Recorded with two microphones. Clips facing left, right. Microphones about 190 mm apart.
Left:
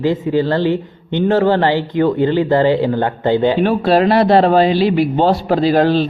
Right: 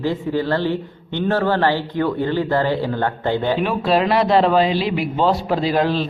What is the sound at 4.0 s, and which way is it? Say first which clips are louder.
A man's voice: left 4 dB; 35° left (ahead or behind).